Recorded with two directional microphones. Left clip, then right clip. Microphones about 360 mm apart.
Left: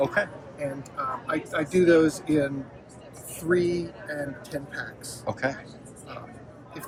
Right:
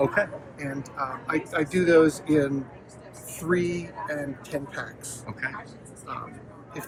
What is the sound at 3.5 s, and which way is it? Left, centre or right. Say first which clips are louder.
Speech: left 2 dB; right.